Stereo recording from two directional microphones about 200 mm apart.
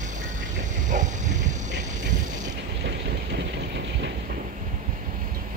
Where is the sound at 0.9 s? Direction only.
40° right (ahead or behind).